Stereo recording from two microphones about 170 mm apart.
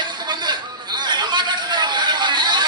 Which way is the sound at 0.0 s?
25° right (ahead or behind).